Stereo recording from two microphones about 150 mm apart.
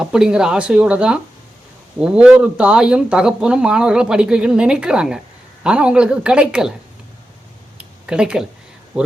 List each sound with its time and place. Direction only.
0.0 s a woman's voice: 5° right (ahead or behind)
7.8 s a sound: 5° right (ahead or behind)
8.9 s speech: 5° right (ahead or behind)